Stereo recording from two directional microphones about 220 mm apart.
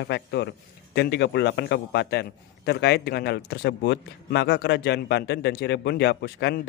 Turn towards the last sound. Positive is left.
turn(degrees=50)  # may be behind; listen again after turning